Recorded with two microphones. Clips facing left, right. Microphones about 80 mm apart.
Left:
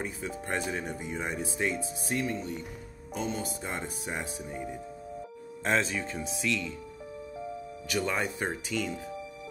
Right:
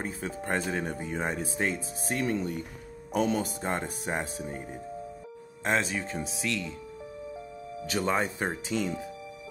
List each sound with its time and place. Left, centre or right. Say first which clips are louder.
0.0 s speech: right 1 dB; right
3.1 s speech: right 6 dB; right
3.6 s speech: right 4 dB; right
7.9 s speech: right 2 dB; right